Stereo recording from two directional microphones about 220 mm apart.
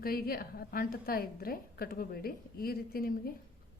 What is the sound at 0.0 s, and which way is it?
A woman's voice, 40° left (ahead or behind).